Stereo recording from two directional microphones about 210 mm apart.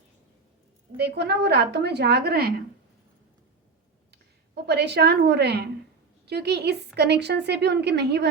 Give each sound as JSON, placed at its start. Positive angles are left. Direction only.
{"t": 0.9, "sound": "a woman's voice", "side_deg": -50}
{"t": 4.1, "sound": "a woman's voice", "side_deg": -50}